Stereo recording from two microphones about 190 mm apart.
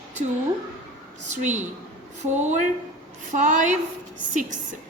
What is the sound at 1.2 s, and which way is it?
A woman's voice, 40° right (ahead or behind).